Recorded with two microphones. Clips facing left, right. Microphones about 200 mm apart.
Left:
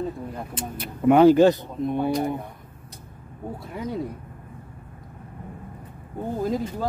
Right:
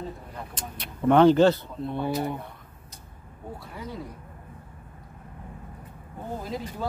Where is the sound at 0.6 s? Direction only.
10° left (ahead or behind).